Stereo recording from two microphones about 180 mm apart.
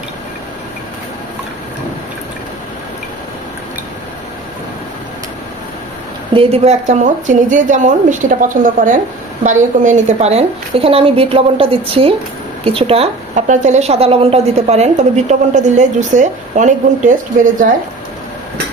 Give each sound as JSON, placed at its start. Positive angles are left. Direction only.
{"t": 6.3, "sound": "a woman's voice", "side_deg": -35}